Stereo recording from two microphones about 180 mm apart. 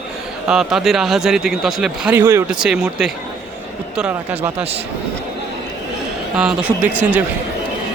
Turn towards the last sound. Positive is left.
turn(degrees=-10)  # may be behind; listen again after turning